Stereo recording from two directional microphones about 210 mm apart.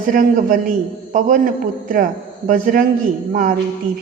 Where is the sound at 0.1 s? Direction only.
40° right (ahead or behind).